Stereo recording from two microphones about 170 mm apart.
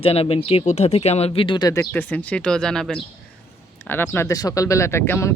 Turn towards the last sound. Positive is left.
turn(degrees=15)  # may be behind; listen again after turning